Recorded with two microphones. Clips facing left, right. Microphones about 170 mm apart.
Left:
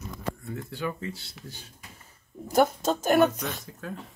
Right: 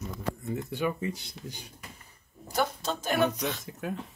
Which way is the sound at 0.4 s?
20° right (ahead or behind).